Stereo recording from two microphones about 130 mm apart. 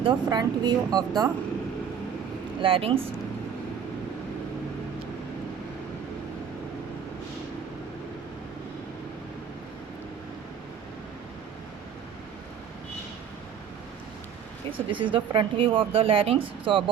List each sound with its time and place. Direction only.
0.0 s speech: 35° right (ahead or behind)
2.6 s speech: 45° right (ahead or behind)
14.8 s speech: 40° right (ahead or behind)